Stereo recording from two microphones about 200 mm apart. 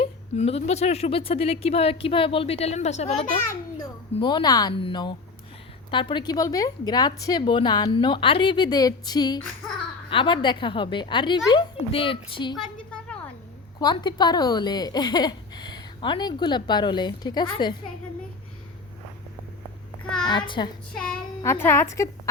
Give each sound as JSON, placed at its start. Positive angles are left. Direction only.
{"t": 0.0, "sound": "a woman's voice", "side_deg": 30}
{"t": 4.2, "sound": "a woman's voice", "side_deg": 20}
{"t": 12.5, "sound": "a sound", "side_deg": 5}
{"t": 13.7, "sound": "a woman's voice", "side_deg": 20}
{"t": 20.2, "sound": "a woman's voice", "side_deg": 25}
{"t": 20.9, "sound": "a child's voice", "side_deg": 5}